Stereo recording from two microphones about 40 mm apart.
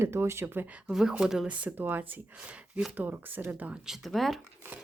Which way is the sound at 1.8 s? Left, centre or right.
Right.